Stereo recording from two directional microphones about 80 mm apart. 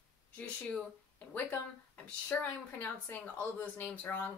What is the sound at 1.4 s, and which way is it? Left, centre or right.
Speech, centre.